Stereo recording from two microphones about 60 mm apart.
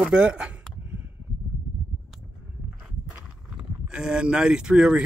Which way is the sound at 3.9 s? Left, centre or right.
Centre.